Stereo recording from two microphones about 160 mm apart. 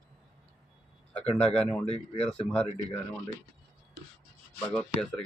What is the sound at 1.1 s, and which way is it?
Speech, 10° left (ahead or behind).